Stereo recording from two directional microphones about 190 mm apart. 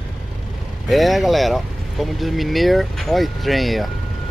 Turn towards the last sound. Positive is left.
turn(degrees=0)  # may be behind; listen again after turning